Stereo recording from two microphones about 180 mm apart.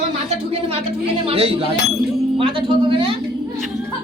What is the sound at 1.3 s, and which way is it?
Speech, 35° right (ahead or behind).